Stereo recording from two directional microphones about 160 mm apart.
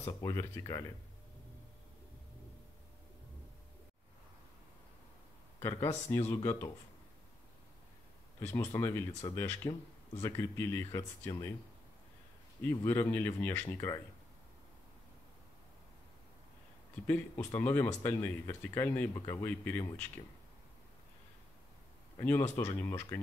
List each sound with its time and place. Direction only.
0.2 s speech: 20° left (ahead or behind)
5.6 s speech: 20° left (ahead or behind)
8.4 s speech: 15° left (ahead or behind)
12.6 s speech: 15° left (ahead or behind)
17.0 s speech: 15° left (ahead or behind)
22.2 s speech: 15° left (ahead or behind)